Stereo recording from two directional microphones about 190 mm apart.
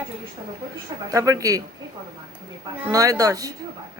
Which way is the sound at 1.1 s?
15° right (ahead or behind).